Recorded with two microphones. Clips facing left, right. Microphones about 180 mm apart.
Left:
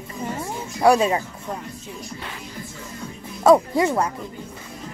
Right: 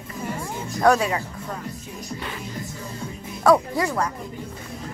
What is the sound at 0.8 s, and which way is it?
Speech, 10° left (ahead or behind).